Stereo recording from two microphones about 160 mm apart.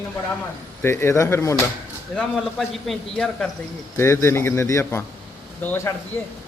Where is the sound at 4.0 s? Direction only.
15° left (ahead or behind).